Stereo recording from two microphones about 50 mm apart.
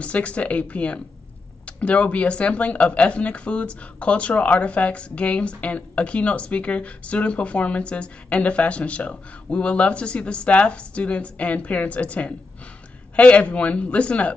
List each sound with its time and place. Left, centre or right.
0.0 s speech: left